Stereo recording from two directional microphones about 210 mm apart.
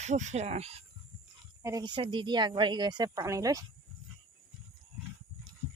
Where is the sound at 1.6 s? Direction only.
20° right (ahead or behind).